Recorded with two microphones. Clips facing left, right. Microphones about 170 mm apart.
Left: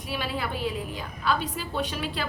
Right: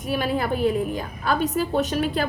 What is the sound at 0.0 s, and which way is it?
A woman's voice, 45° right (ahead or behind).